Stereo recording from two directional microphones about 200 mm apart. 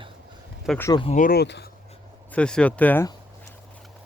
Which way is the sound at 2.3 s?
5° left (ahead or behind).